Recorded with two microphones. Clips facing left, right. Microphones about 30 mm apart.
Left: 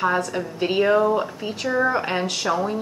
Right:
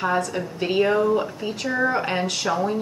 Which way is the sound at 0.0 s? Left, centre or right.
Centre.